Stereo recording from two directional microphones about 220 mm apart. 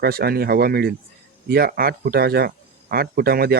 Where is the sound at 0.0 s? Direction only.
45° right (ahead or behind).